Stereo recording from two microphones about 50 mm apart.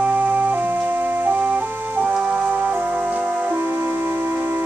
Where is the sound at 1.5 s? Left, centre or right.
Right.